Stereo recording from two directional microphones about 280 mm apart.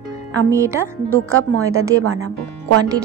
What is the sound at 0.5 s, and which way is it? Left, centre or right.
Speech, centre.